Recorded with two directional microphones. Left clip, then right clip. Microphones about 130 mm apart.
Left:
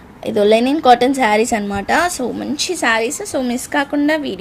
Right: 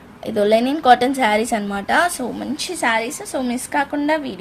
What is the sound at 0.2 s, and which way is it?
A woman's voice, 30° left (ahead or behind).